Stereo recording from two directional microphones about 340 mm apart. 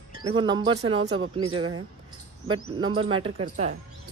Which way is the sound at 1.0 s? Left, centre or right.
Right.